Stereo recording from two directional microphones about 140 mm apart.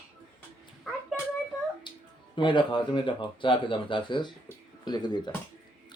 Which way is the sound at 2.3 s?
35° left (ahead or behind).